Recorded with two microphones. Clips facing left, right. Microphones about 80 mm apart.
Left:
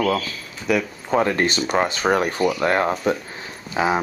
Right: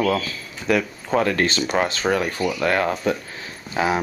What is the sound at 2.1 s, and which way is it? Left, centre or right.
Speech, left.